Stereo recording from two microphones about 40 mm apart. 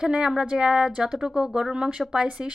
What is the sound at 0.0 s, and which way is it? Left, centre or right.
A woman's voice, centre.